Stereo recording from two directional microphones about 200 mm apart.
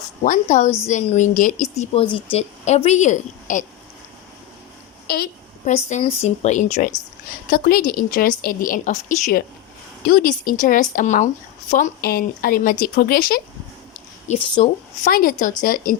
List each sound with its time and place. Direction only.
0.3 s a woman's voice: 40° left (ahead or behind)
5.0 s a sound: 50° left (ahead or behind)
5.7 s a woman's voice: 35° left (ahead or behind)
14.4 s a woman's voice: 25° left (ahead or behind)
15.0 s speech: 45° left (ahead or behind)